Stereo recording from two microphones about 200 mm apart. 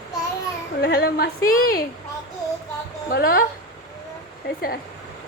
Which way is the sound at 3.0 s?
45° left (ahead or behind).